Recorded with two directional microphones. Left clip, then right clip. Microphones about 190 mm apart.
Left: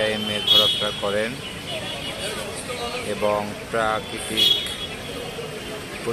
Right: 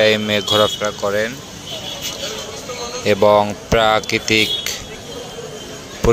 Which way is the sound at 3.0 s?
45° right (ahead or behind).